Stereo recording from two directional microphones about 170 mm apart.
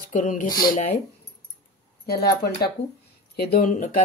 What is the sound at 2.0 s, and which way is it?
Speech, 70° left (ahead or behind).